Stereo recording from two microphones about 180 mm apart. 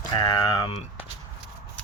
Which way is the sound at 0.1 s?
25° left (ahead or behind).